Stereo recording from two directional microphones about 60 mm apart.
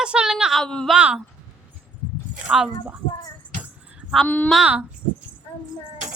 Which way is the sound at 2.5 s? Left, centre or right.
Centre.